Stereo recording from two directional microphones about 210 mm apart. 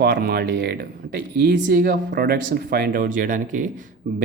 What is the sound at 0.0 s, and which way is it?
Speech, 50° right (ahead or behind).